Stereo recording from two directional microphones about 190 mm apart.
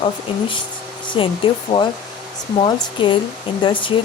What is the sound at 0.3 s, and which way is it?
A woman's voice, 25° left (ahead or behind).